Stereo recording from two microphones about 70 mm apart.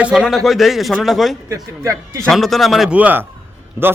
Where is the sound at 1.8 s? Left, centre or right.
Right.